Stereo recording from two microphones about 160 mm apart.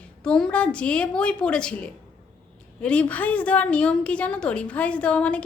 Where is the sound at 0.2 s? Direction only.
5° left (ahead or behind).